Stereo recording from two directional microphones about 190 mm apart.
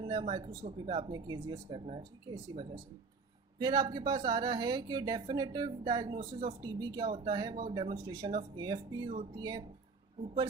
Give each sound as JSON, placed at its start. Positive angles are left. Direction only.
{"t": 0.0, "sound": "a woman's voice", "side_deg": -20}